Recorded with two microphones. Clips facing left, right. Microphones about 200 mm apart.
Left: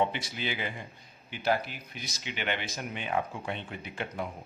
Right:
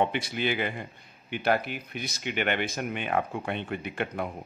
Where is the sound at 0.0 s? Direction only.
60° right (ahead or behind).